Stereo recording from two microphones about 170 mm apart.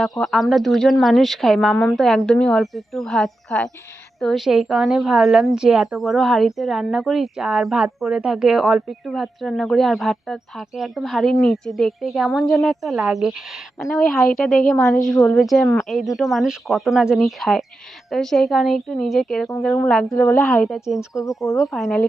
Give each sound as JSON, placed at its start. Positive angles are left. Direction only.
{"t": 0.2, "sound": "a woman's voice", "side_deg": 0}
{"t": 20.1, "sound": "a woman's voice", "side_deg": 15}